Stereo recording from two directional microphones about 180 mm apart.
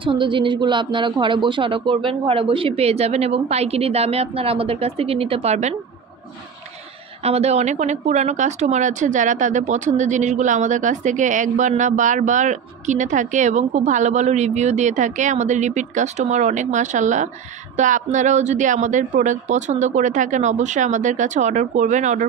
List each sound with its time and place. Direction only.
0.0 s speech: 30° right (ahead or behind)
7.2 s speech: 35° right (ahead or behind)